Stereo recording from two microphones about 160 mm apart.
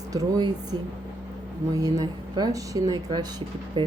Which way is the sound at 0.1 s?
25° right (ahead or behind).